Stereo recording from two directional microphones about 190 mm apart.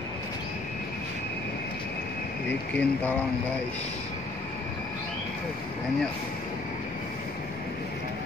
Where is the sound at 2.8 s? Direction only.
10° left (ahead or behind).